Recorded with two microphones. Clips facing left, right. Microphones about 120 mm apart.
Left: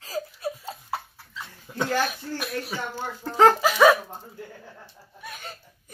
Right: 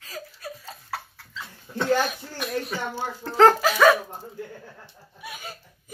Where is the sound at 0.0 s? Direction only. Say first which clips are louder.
Left 7 dB; 30° left (ahead or behind).